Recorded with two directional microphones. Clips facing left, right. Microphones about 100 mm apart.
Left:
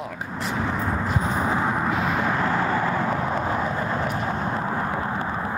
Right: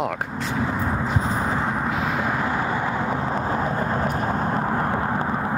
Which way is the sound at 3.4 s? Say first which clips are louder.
Right 1 dB; 35° right (ahead or behind).